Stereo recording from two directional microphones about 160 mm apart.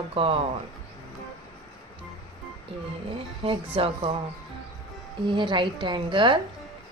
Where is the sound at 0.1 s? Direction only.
35° right (ahead or behind).